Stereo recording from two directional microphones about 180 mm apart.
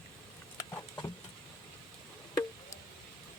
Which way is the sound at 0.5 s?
20° left (ahead or behind).